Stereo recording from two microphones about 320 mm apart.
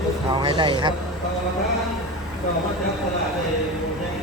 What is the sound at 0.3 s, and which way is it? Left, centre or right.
Speech, centre.